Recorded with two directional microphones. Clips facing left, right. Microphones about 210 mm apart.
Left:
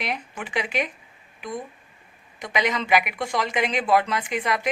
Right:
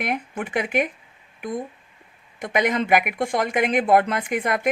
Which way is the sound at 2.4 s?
50° right (ahead or behind).